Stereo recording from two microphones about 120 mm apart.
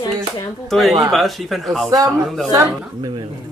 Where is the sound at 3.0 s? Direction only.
40° right (ahead or behind).